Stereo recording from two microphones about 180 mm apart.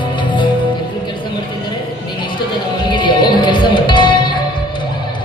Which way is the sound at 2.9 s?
25° left (ahead or behind).